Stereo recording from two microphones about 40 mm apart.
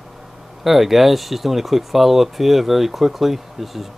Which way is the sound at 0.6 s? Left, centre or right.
Centre.